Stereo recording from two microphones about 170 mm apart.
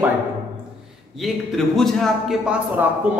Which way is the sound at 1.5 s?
Centre (ahead or behind).